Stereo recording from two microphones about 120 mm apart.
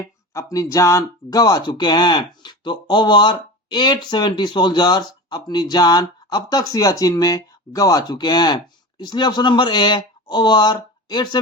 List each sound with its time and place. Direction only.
0.3 s speech: 25° left (ahead or behind)